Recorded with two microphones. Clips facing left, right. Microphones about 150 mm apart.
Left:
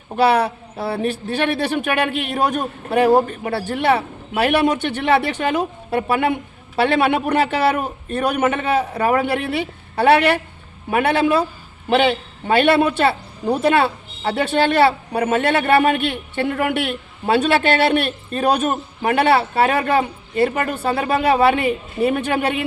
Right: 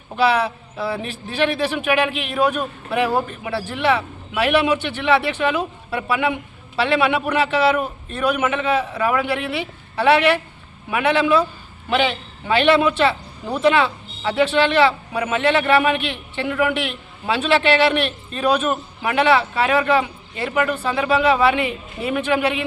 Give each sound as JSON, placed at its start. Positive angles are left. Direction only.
{"t": 0.2, "sound": "a man's voice", "side_deg": 40}